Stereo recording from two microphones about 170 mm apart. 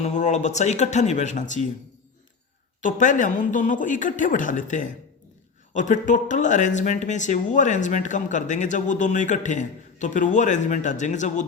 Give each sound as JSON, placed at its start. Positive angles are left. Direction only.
{"t": 0.0, "sound": "speech", "side_deg": 45}
{"t": 2.8, "sound": "speech", "side_deg": 50}